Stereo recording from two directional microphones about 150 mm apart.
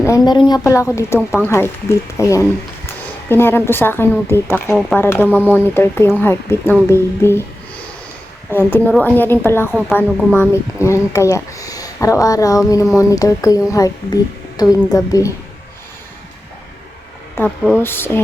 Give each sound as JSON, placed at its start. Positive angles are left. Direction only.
{"t": 0.0, "sound": "speech", "side_deg": 20}
{"t": 8.4, "sound": "speech", "side_deg": 15}
{"t": 17.4, "sound": "speech", "side_deg": 15}